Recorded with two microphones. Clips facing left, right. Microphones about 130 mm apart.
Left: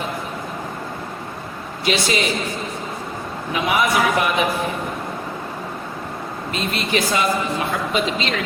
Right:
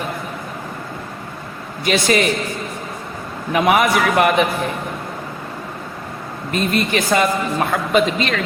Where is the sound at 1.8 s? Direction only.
50° right (ahead or behind).